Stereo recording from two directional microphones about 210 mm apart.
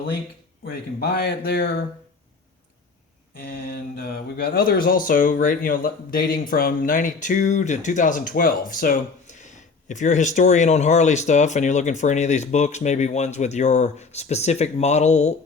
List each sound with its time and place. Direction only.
0.6 s speech: 45° left (ahead or behind)
3.4 s speech: 45° left (ahead or behind)